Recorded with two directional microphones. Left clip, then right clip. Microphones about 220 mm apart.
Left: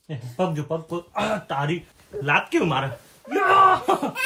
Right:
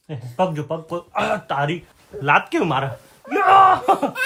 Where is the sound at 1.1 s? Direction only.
30° right (ahead or behind).